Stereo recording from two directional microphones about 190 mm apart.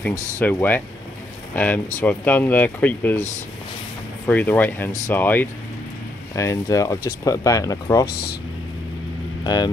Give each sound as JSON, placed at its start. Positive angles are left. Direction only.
{"t": 0.4, "sound": "speech", "side_deg": 10}
{"t": 4.3, "sound": "speech", "side_deg": 10}
{"t": 9.4, "sound": "speech", "side_deg": 20}